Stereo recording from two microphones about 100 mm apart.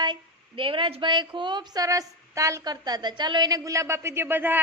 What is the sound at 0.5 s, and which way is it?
A woman's voice, 60° right (ahead or behind).